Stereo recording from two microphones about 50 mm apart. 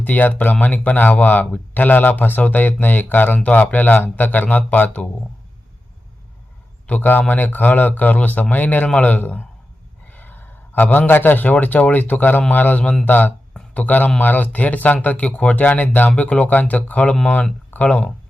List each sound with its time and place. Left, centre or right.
0.0 s speech: left
6.8 s speech: left
10.1 s a sound: left
11.9 s speech: left
12.8 s speech: centre
13.1 s speech: left